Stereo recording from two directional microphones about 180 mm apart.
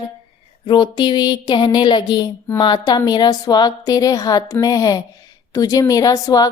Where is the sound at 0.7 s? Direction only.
25° left (ahead or behind).